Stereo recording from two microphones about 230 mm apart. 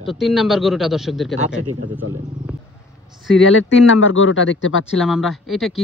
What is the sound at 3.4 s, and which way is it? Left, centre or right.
Speech, left.